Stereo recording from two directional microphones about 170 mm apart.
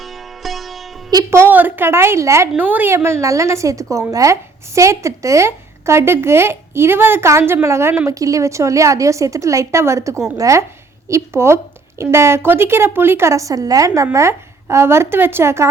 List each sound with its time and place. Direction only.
0.0 s sitar: centre (ahead or behind)
1.1 s a woman's voice: 15° right (ahead or behind)